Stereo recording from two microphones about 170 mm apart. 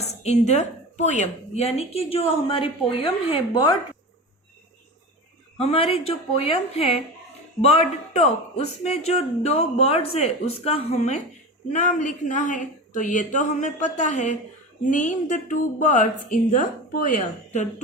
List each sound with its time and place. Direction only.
0.0 s a woman's voice: 40° left (ahead or behind)
5.5 s a woman's voice: 35° left (ahead or behind)
7.6 s a woman's voice: 40° left (ahead or behind)